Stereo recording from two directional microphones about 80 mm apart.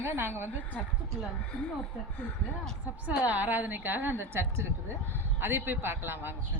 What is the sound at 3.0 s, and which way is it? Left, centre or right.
A woman's voice, centre.